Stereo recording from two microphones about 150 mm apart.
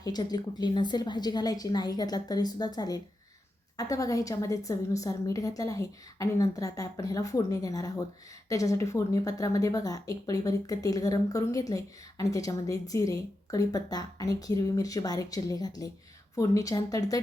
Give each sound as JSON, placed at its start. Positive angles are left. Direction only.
{"t": 0.0, "sound": "speech", "side_deg": 25}